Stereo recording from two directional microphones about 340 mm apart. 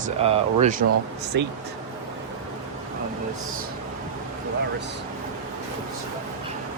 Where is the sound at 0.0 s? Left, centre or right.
Centre.